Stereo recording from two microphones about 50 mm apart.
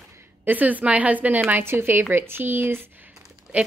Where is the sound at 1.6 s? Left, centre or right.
Right.